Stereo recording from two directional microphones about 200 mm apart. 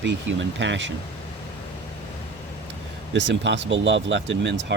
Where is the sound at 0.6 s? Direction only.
65° right (ahead or behind).